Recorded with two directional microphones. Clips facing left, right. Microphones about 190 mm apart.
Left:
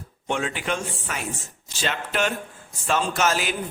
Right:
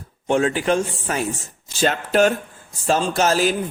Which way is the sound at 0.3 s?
40° right (ahead or behind).